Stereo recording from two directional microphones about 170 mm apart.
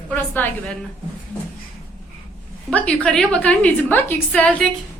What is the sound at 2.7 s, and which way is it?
A woman's voice, 5° left (ahead or behind).